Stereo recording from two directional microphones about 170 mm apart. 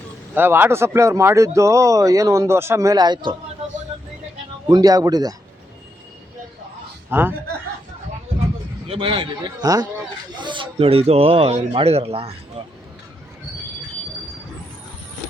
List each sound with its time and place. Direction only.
0.3 s speech: 10° right (ahead or behind)
4.7 s a man's voice: 20° right (ahead or behind)
7.1 s speech: 10° right (ahead or behind)
8.9 s a man's voice: 30° right (ahead or behind)